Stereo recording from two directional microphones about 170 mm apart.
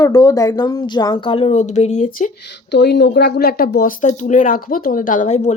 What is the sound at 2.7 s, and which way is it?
Speech, 85° left.